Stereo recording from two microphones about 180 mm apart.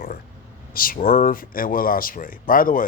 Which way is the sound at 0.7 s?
50° left (ahead or behind).